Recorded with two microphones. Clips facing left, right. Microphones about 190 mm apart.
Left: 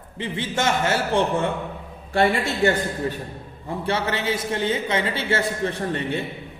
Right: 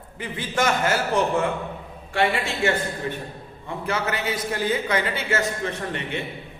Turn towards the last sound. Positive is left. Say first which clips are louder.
# left 4 dB
turn(degrees=35)  # may be behind; listen again after turning